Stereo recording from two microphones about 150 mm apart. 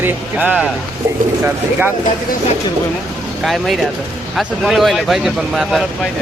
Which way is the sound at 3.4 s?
Centre (ahead or behind).